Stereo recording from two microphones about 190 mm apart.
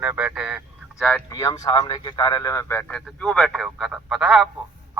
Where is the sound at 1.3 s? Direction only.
20° left (ahead or behind).